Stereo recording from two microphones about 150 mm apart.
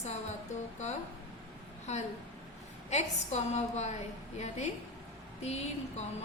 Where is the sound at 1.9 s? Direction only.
50° left (ahead or behind).